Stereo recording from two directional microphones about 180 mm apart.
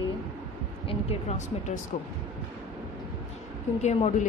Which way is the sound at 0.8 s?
35° left (ahead or behind).